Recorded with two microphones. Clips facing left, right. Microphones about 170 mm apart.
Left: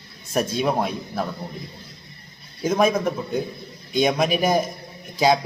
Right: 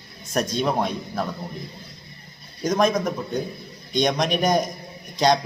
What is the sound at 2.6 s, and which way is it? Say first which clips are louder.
A man's voice: left 1 dB; 10° left (ahead or behind).